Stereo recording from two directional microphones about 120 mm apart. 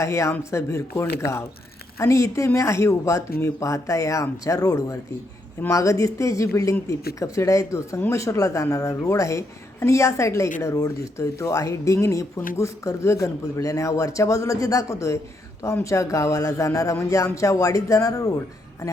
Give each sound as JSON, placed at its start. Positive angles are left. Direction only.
{"t": 0.0, "sound": "speech", "side_deg": 25}